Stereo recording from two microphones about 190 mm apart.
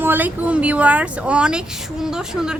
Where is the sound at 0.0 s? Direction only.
10° right (ahead or behind).